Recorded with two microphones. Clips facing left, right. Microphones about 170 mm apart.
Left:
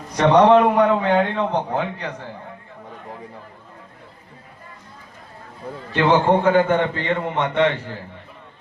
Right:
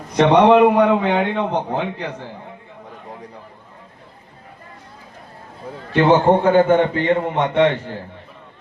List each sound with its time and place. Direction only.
0.3 s a man's voice: 15° right (ahead or behind)
5.9 s a man's voice: 20° right (ahead or behind)
7.4 s a man's voice: 25° right (ahead or behind)